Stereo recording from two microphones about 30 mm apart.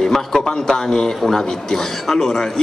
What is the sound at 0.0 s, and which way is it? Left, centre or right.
A man's voice, centre.